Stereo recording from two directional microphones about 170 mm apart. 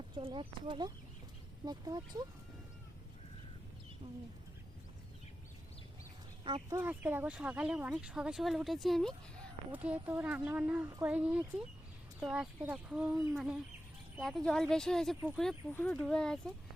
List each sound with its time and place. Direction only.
0.2 s speech: 30° right (ahead or behind)
6.4 s speech: 30° right (ahead or behind)
6.7 s speech: 10° right (ahead or behind)
9.7 s speech: 10° right (ahead or behind)